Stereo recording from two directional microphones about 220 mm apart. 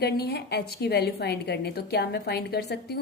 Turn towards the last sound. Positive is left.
turn(degrees=45)  # may be behind; listen again after turning